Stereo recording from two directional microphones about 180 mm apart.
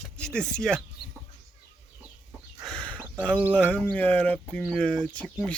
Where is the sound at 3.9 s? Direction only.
5° left (ahead or behind).